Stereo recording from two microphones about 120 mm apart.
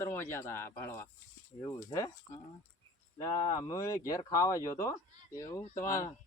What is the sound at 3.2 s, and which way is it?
Speech, 25° left (ahead or behind).